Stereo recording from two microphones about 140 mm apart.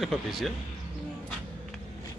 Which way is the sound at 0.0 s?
Centre (ahead or behind).